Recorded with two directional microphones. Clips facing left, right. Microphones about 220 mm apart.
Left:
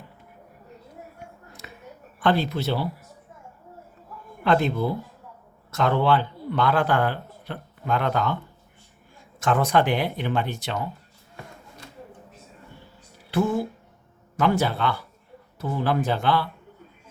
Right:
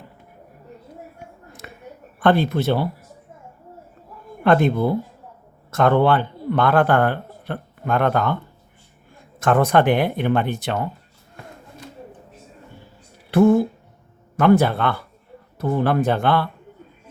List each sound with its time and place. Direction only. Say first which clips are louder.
1.6 s a sound: right 4 dB; 55° right (ahead or behind)
2.2 s a man's voice: right 5 dB; 55° right (ahead or behind)
4.4 s a man's voice: right 5 dB; 55° right (ahead or behind)
9.4 s speech: right 5 dB; 55° right (ahead or behind)
13.3 s speech: right 9 dB; 55° right (ahead or behind)